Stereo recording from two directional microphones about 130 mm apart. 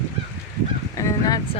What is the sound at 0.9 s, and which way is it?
Honk, 25° left (ahead or behind).